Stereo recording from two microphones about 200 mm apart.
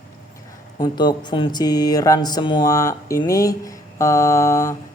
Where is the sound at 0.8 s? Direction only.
20° left (ahead or behind).